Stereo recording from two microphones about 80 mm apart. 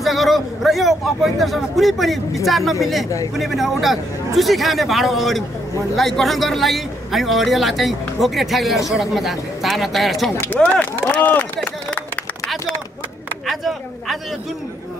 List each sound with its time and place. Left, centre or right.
0.0 s a man's voice: centre
10.6 s a sound: centre
13.5 s speech: centre